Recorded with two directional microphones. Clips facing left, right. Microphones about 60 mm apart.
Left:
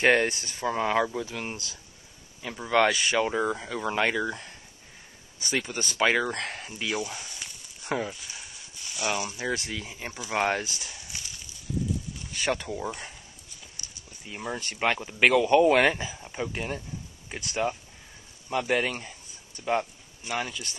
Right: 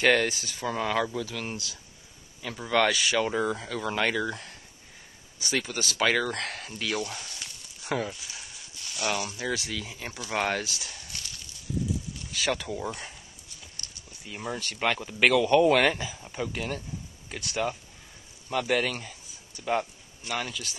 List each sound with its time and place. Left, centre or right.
0.0 s speech: left
2.4 s speech: centre
6.0 s speech: centre
9.4 s speech: left
9.8 s speech: centre
12.4 s speech: centre
16.3 s speech: centre
17.4 s speech: centre